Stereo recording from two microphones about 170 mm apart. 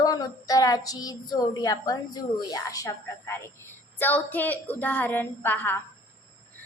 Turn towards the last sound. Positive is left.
turn(degrees=10)  # may be behind; listen again after turning